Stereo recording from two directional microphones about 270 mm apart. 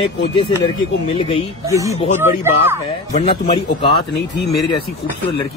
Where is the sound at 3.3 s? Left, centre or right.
Centre.